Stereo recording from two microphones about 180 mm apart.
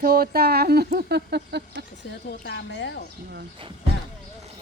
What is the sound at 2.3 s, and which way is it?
Speech, 80° left.